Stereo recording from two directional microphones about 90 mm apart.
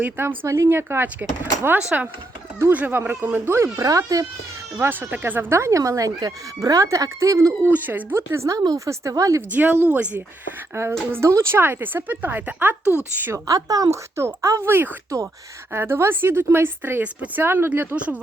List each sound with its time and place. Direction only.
0.2 s speech: 30° right (ahead or behind)
3.8 s speech: 40° right (ahead or behind)
4.8 s speech: 20° right (ahead or behind)
7.9 s speech: 25° right (ahead or behind)
9.5 s speech: 20° right (ahead or behind)
10.7 s speech: 30° right (ahead or behind)
12.8 s speech: 30° left (ahead or behind)
13.1 s speech: 25° right (ahead or behind)
13.5 s speech: 40° right (ahead or behind); by 18.2 s 15° right (ahead or behind)